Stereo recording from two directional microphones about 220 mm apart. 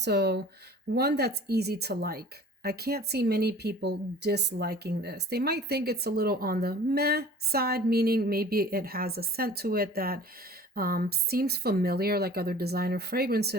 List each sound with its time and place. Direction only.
0.0 s speech: 50° right (ahead or behind)